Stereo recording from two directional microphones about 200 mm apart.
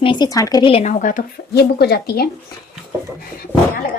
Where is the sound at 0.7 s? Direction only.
35° left (ahead or behind); by 2.3 s 50° left (ahead or behind).